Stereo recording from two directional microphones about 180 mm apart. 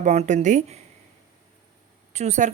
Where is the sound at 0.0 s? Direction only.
40° right (ahead or behind).